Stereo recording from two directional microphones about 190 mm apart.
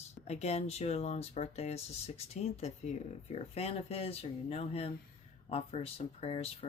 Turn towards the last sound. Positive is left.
turn(degrees=30)  # may be behind; listen again after turning